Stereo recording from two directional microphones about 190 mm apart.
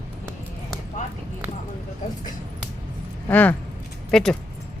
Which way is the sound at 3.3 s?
10° left (ahead or behind).